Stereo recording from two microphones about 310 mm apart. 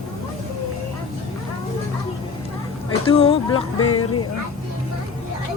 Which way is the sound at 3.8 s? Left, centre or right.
Left.